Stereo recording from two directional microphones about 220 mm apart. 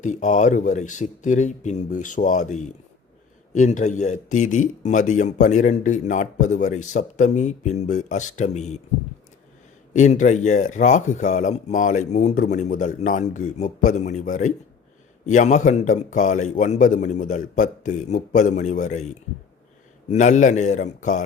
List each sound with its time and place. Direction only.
0.0 s speech: 35° left (ahead or behind)
9.9 s speech: 35° left (ahead or behind)